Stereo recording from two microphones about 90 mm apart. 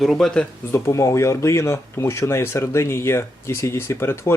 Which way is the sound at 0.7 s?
35° left (ahead or behind).